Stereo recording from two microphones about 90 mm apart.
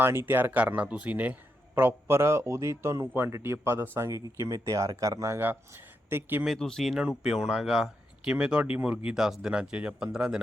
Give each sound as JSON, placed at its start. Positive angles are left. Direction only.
{"t": 0.0, "sound": "speech", "side_deg": -25}
{"t": 6.1, "sound": "speech", "side_deg": -25}
{"t": 6.4, "sound": "speech", "side_deg": 0}
{"t": 8.3, "sound": "speech", "side_deg": -10}